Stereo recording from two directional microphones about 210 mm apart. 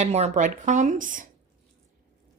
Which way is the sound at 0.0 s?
30° right (ahead or behind).